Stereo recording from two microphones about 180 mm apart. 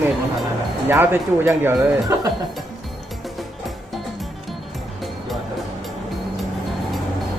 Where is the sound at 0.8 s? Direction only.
10° right (ahead or behind).